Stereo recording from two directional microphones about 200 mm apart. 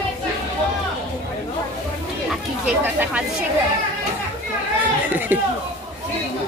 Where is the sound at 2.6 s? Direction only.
10° right (ahead or behind).